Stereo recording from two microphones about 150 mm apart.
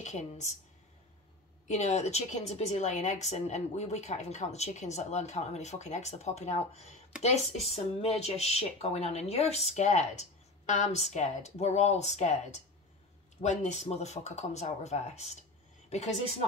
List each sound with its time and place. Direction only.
0.0 s speech: 50° left (ahead or behind)
1.8 s speech: 45° left (ahead or behind)
13.4 s speech: 50° left (ahead or behind)